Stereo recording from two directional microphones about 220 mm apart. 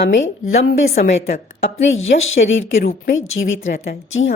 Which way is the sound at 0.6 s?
45° left (ahead or behind).